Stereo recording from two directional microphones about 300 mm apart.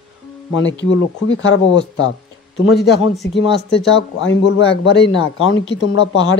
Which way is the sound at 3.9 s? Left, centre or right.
Left.